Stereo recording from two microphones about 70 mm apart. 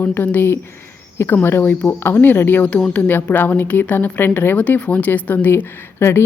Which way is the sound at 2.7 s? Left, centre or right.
Centre.